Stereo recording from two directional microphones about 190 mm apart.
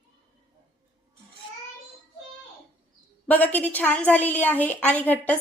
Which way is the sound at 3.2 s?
10° left (ahead or behind).